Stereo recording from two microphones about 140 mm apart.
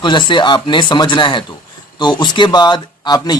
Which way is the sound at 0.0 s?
35° left (ahead or behind).